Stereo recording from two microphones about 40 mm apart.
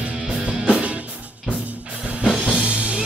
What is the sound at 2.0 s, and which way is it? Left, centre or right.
Music, right.